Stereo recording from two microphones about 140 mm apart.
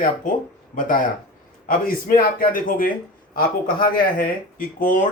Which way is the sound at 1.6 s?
85° left.